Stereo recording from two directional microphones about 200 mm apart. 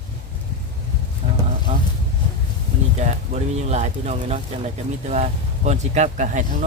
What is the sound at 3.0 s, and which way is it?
Speech, 35° right (ahead or behind).